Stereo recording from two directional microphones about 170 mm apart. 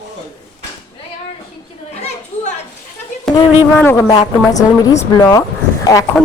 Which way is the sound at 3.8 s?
15° left (ahead or behind).